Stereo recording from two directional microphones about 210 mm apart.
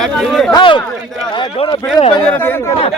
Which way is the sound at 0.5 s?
20° left (ahead or behind).